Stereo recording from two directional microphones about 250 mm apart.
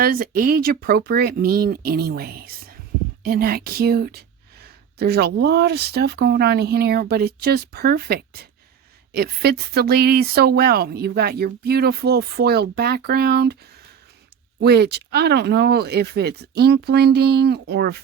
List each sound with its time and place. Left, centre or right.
0.0 s speech: right
14.6 s speech: right